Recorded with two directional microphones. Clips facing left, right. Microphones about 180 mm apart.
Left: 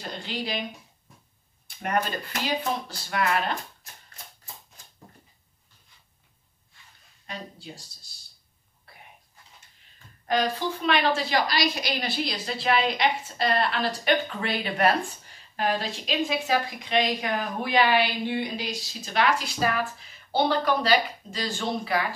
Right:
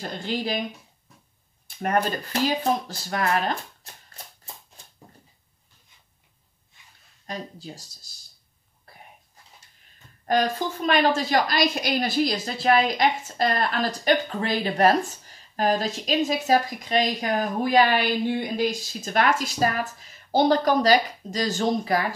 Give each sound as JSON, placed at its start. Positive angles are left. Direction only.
{"t": 0.0, "sound": "a woman's voice", "side_deg": -40}
{"t": 1.8, "sound": "speech", "side_deg": -40}
{"t": 7.2, "sound": "speech", "side_deg": -40}
{"t": 10.2, "sound": "a woman's voice", "side_deg": -45}